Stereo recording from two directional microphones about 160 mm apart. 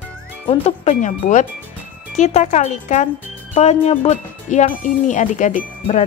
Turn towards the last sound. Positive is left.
turn(degrees=50)  # may be behind; listen again after turning